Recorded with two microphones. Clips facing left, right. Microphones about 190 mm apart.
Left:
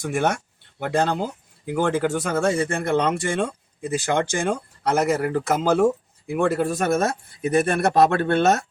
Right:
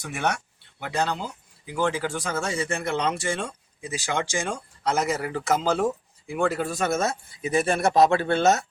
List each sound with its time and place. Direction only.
0.0 s speech: 50° left (ahead or behind)